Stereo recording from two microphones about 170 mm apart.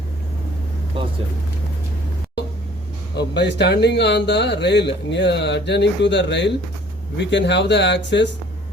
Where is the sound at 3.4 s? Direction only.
85° left.